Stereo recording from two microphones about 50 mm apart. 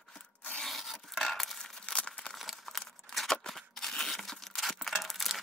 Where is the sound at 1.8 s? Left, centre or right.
Centre.